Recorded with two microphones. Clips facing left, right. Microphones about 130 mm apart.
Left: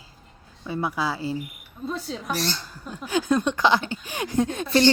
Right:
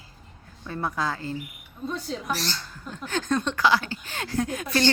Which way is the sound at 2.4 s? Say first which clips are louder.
Left 4 dB; 10° left (ahead or behind).